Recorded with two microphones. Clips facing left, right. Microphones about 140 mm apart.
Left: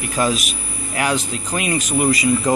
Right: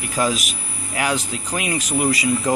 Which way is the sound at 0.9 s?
10° right (ahead or behind).